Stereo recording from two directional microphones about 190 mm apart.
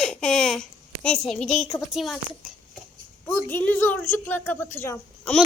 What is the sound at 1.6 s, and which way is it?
Speech, 20° left (ahead or behind).